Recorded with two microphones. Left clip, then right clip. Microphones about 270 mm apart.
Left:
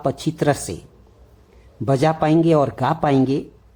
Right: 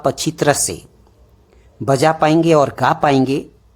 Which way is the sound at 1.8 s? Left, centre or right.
Right.